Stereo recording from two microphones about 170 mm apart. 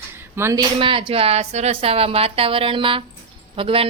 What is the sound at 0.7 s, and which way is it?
A woman's voice, 30° right (ahead or behind).